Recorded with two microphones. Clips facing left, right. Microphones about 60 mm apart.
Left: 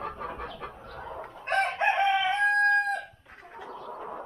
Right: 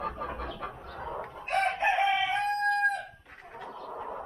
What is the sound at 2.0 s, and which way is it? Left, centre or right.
Crowing, left.